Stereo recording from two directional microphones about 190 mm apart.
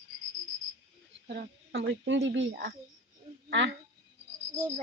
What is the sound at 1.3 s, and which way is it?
A woman's voice, 65° right (ahead or behind).